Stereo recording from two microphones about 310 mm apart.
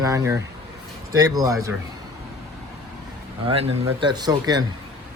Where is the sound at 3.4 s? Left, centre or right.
Centre.